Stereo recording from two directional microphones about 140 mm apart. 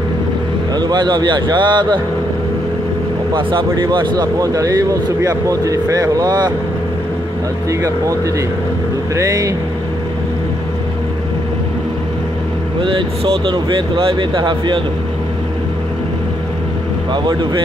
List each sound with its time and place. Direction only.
0.7 s speech: 30° right (ahead or behind)
3.3 s speech: 35° right (ahead or behind)
9.1 s speech: 25° right (ahead or behind)
12.8 s speech: 40° right (ahead or behind)
17.1 s speech: 30° right (ahead or behind)